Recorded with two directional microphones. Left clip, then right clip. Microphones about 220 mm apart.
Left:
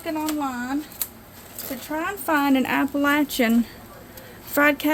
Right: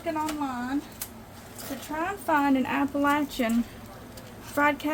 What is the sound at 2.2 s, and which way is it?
A woman's voice, 45° left (ahead or behind).